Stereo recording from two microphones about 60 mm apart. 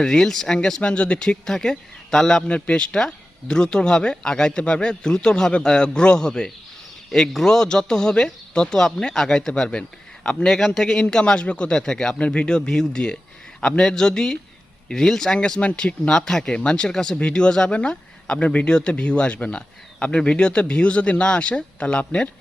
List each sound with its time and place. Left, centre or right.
0.0 s speech: centre